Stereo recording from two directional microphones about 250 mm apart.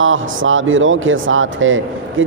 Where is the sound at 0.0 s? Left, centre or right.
Right.